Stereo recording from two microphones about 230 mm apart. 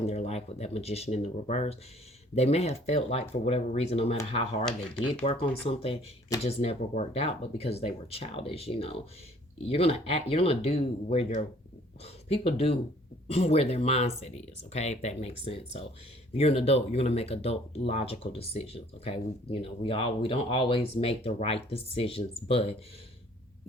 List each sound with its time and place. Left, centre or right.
0.0 s speech: left